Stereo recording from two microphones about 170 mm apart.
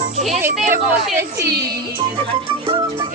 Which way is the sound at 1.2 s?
15° right (ahead or behind).